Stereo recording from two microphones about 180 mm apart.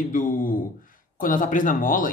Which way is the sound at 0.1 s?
50° left (ahead or behind).